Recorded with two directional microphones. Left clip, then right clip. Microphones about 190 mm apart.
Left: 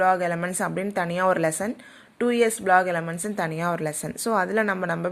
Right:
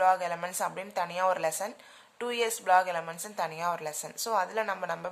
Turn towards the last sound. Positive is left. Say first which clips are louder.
# left 7 dB
turn(degrees=20)  # may be behind; listen again after turning